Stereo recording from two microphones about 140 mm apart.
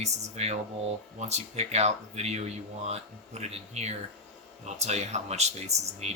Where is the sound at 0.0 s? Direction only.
50° right (ahead or behind).